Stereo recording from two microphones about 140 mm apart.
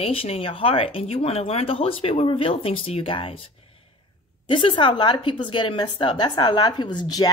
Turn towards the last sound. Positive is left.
turn(degrees=30)  # may be behind; listen again after turning